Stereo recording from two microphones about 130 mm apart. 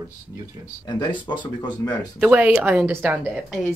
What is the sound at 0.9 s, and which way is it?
Speech, 35° left (ahead or behind).